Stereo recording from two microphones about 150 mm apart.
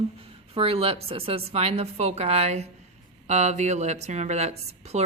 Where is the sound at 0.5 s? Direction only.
40° right (ahead or behind).